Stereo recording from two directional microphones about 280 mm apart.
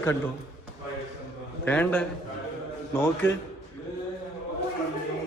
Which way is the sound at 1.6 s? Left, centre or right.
Centre.